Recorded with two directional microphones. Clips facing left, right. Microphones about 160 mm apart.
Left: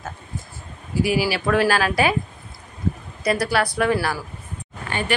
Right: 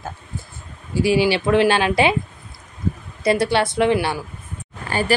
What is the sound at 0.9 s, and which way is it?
Speech, 25° right (ahead or behind).